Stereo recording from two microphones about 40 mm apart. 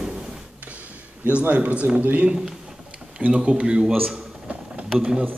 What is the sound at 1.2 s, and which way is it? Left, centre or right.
A man's voice, right.